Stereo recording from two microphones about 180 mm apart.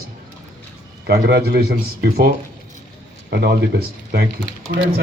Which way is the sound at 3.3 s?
60° right (ahead or behind).